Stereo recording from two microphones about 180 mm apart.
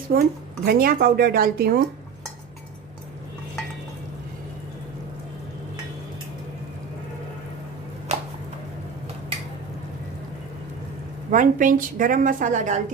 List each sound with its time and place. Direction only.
0.1 s speech: 55° right (ahead or behind)
11.3 s a woman's voice: 45° right (ahead or behind)